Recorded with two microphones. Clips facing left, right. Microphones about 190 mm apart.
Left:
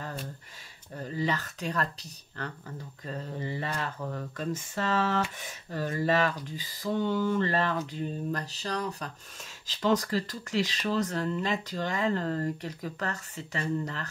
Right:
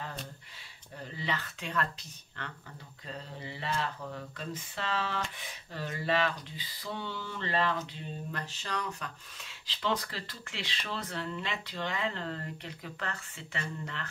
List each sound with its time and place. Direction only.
0.9 s speech: 45° left (ahead or behind)